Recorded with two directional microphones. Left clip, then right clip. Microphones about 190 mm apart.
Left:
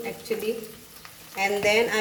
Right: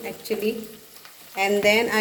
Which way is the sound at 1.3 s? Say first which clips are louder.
Right 3 dB; 40° right (ahead or behind).